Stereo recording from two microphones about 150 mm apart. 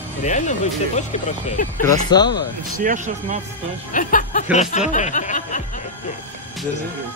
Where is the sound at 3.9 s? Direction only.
60° left (ahead or behind).